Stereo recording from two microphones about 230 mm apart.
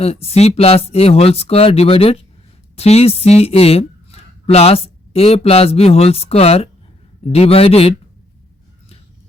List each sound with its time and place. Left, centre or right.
0.0 s speech: left